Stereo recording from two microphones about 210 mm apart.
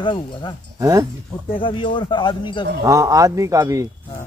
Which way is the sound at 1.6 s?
25° left (ahead or behind).